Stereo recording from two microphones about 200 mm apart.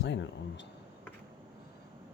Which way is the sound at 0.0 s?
60° left (ahead or behind).